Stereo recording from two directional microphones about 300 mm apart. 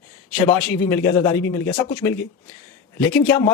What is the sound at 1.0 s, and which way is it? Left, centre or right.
Speech, left.